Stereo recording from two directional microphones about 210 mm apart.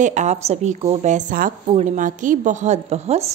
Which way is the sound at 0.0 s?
35° right (ahead or behind).